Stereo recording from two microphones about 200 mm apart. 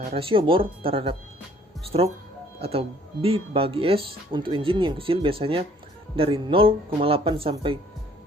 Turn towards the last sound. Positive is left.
turn(degrees=-25)  # may be behind; listen again after turning